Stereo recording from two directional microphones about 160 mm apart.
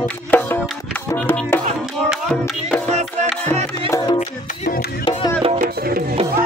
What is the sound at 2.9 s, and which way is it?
Music, 45° right (ahead or behind).